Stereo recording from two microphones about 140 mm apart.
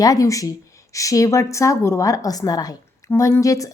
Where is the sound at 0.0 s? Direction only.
25° left (ahead or behind).